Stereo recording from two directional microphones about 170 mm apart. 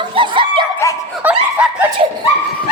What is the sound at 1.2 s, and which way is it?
Laughter, 10° right (ahead or behind).